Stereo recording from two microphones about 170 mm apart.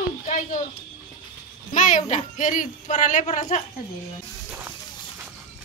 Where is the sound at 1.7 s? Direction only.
45° left (ahead or behind).